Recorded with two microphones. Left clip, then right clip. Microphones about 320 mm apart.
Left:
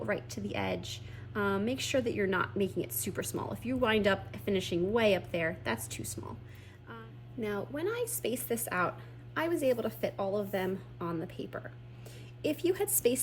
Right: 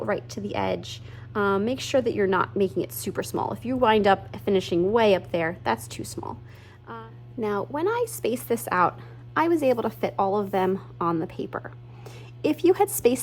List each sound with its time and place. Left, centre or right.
0.0 s a woman's voice: centre
7.4 s a woman's voice: centre